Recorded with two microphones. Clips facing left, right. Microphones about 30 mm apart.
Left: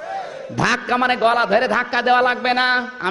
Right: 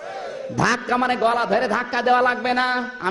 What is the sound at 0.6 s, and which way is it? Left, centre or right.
A man's voice, left.